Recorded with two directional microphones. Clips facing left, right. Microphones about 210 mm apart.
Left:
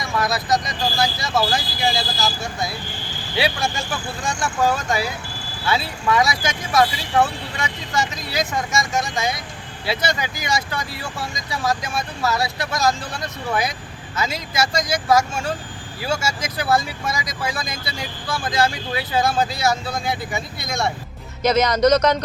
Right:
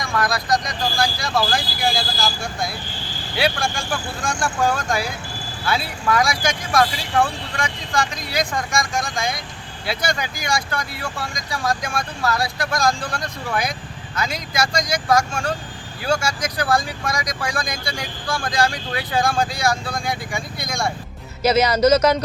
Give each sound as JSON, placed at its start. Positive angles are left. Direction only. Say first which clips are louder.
{"t": 0.0, "sound": "speech", "louder": "even", "side_deg": 5}
{"t": 4.2, "sound": "speech", "louder": "even", "side_deg": 20}
{"t": 4.6, "sound": "speech", "louder": "left 1 dB", "side_deg": 5}